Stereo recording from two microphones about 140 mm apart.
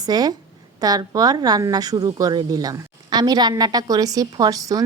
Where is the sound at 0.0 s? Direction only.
30° right (ahead or behind).